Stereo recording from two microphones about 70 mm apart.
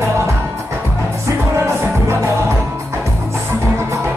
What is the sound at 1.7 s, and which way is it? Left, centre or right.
Music, right.